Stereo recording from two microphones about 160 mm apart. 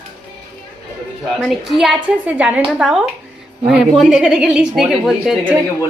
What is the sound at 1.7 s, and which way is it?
Speech, centre (ahead or behind).